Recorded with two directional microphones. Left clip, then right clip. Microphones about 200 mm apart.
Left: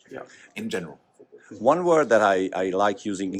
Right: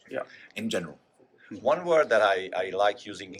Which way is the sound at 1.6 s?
40° left (ahead or behind).